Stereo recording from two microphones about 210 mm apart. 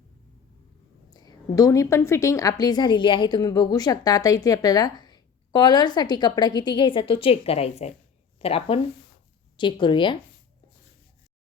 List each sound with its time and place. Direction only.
1.1 s a woman's voice: 20° left (ahead or behind)